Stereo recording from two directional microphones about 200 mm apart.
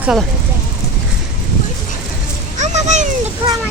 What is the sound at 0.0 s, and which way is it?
Speech, 5° right (ahead or behind).